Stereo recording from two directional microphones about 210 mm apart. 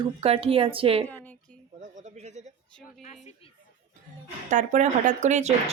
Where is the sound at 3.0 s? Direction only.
35° left (ahead or behind).